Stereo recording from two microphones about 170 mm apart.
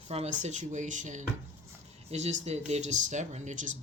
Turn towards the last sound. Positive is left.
turn(degrees=-45)  # may be behind; listen again after turning